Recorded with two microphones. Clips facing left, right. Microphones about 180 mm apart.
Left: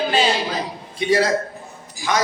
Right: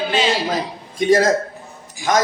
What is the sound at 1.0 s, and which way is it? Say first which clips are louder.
Speech: right 3 dB; 45° right (ahead or behind).